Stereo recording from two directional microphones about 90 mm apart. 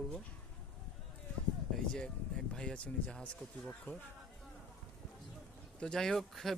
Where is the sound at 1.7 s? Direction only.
5° left (ahead or behind).